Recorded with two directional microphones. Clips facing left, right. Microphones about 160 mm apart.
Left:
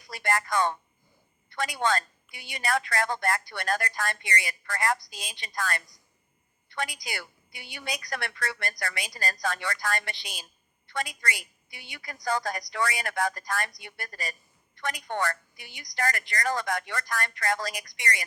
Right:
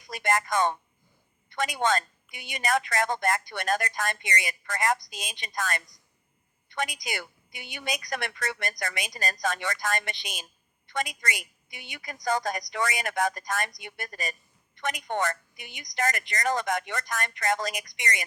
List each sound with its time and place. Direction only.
0.1 s a woman's voice: 20° right (ahead or behind)